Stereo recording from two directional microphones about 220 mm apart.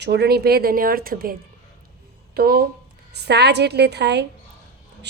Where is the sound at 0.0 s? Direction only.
50° right (ahead or behind).